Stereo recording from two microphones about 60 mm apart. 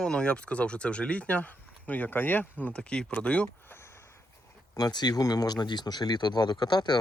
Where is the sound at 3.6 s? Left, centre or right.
Left.